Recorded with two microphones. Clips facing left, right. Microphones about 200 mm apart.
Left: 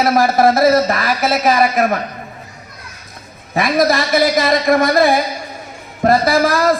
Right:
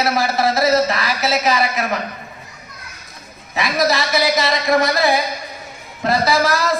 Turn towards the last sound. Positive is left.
turn(degrees=55)  # may be behind; listen again after turning